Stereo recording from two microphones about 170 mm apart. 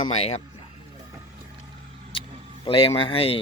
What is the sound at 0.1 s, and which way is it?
Speech, 40° left (ahead or behind).